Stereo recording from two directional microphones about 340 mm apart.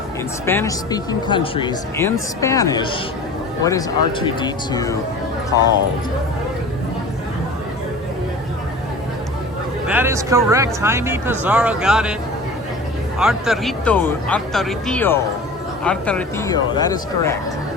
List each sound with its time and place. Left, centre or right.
0.4 s speech: centre
9.8 s speech: centre
13.1 s speech: centre